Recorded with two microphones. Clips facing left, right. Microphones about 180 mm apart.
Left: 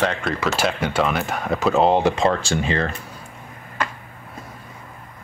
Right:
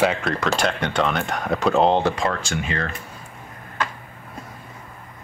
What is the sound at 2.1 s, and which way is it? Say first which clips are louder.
Speech: left 5 dB; 25° left (ahead or behind).